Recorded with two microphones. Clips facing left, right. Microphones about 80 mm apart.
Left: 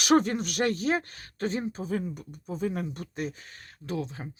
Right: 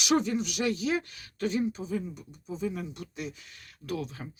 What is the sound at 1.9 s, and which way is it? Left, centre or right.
Speech, left.